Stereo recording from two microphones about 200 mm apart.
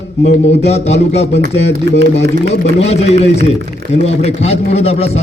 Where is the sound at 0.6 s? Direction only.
30° left (ahead or behind).